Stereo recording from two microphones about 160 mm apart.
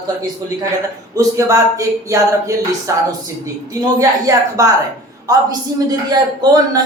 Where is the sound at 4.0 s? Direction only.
20° right (ahead or behind).